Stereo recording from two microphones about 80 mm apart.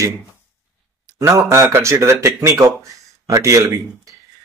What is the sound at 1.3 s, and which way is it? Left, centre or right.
Speech, right.